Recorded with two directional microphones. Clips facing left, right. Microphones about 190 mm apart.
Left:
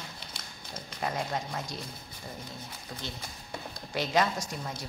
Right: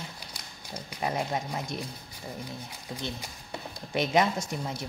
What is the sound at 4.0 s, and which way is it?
Speech, 20° right (ahead or behind).